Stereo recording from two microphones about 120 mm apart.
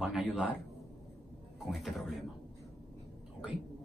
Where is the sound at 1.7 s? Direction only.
Centre (ahead or behind).